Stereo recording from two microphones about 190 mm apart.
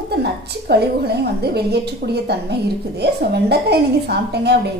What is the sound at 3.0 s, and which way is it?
A woman's voice, 60° right (ahead or behind).